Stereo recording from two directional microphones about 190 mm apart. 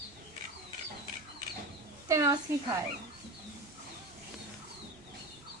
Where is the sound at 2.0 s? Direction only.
15° right (ahead or behind).